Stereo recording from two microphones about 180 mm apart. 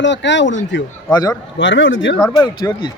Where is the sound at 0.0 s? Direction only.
85° left.